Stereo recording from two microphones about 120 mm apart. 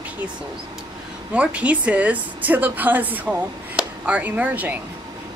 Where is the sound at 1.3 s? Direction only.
10° right (ahead or behind).